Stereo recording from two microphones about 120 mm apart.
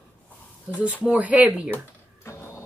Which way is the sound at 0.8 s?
10° right (ahead or behind).